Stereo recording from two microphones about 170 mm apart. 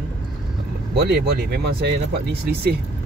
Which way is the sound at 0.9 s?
70° right (ahead or behind).